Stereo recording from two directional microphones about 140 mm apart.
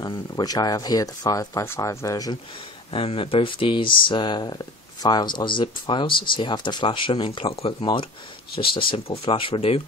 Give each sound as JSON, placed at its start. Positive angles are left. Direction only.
{"t": 0.0, "sound": "speech", "side_deg": 30}
{"t": 2.9, "sound": "speech", "side_deg": 40}